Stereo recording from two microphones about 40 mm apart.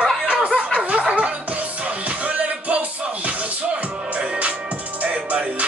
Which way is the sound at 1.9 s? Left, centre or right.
Right.